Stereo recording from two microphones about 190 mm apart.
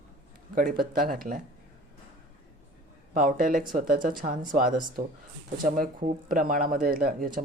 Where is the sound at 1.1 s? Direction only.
45° right (ahead or behind).